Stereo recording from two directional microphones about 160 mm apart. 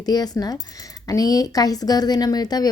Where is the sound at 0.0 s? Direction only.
25° left (ahead or behind).